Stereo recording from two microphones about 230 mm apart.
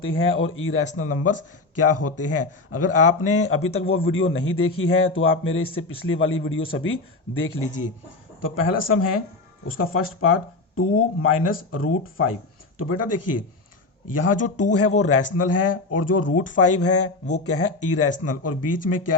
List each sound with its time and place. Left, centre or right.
0.2 s speech: left
3.8 s a man's voice: left
4.1 s speech: left
7.4 s speech: left
12.8 s speech: left